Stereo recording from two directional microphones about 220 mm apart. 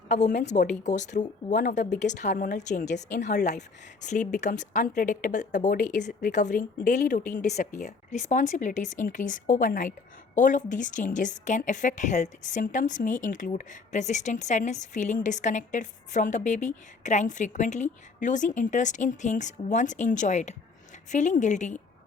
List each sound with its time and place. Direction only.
0.5 s a woman's voice: 35° left (ahead or behind)